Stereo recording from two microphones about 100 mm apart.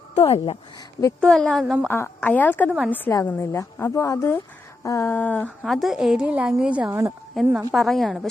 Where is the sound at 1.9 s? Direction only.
20° left (ahead or behind).